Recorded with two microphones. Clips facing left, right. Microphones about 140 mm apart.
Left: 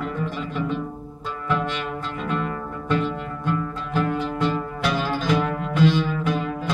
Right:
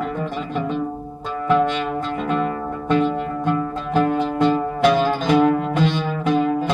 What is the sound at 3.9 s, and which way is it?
Music, 20° right (ahead or behind).